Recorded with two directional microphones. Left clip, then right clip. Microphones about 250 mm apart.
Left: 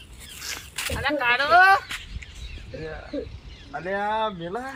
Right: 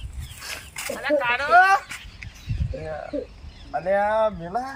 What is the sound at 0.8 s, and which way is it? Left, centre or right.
Speech, centre.